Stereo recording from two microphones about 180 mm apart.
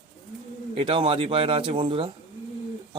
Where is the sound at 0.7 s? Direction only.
30° right (ahead or behind).